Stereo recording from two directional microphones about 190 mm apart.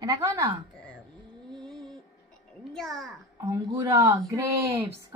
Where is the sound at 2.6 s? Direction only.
Centre (ahead or behind).